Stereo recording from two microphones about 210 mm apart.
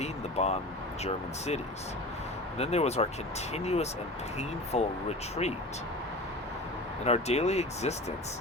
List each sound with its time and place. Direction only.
0.0 s speech: 30° left (ahead or behind)
7.0 s speech: 30° left (ahead or behind)